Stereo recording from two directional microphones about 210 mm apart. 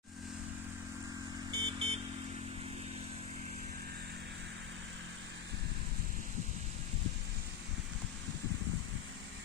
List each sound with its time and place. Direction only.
1.5 s vehicle: 20° right (ahead or behind)